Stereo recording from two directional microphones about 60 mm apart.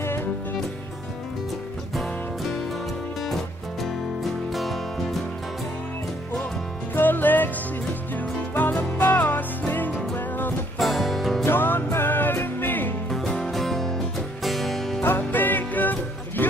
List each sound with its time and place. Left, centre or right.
0.0 s music: left
3.3 s music: centre
7.0 s music: left
10.8 s music: centre
11.4 s music: left
13.1 s music: centre
15.0 s music: left